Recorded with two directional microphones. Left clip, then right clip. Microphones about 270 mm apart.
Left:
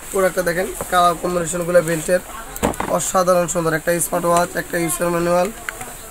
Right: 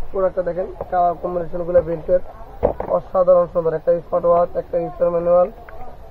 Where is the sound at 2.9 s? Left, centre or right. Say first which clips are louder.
Right 2 dB; left.